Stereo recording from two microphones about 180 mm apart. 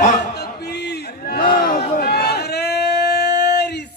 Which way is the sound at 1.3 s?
55° left (ahead or behind).